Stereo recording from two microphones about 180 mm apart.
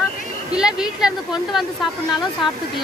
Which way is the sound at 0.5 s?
5° right (ahead or behind).